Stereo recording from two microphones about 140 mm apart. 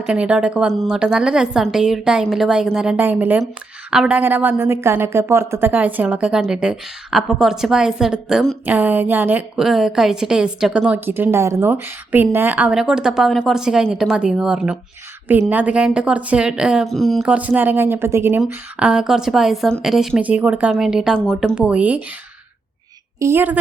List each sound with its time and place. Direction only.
0.0 s a woman's voice: 5° right (ahead or behind)
17.3 s a woman's voice: 10° right (ahead or behind)
23.2 s a woman's voice: 15° right (ahead or behind)